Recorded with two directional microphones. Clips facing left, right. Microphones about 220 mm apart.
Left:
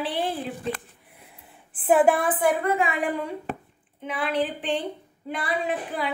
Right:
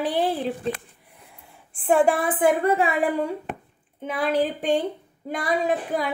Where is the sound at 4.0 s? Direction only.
40° right (ahead or behind).